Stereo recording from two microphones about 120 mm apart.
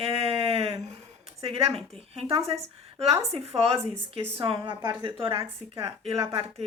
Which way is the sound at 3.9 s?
20° right (ahead or behind).